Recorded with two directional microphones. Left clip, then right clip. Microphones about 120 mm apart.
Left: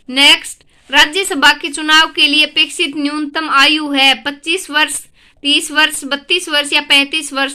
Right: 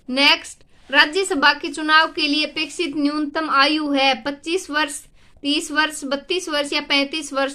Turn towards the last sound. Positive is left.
turn(degrees=15)  # may be behind; listen again after turning